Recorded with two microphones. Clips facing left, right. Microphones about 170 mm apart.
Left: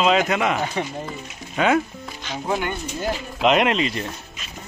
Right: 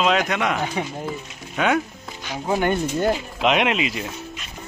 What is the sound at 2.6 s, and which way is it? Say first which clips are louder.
Speech: right 7 dB; 55° right (ahead or behind).